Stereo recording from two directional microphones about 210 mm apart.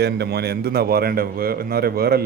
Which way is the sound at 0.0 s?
50° right (ahead or behind).